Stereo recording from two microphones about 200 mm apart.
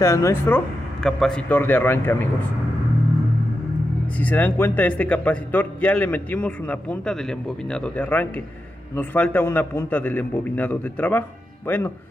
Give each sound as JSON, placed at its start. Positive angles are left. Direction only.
{"t": 0.0, "sound": "a man's voice", "side_deg": 15}
{"t": 1.0, "sound": "a man's voice", "side_deg": 5}
{"t": 4.2, "sound": "a man's voice", "side_deg": 10}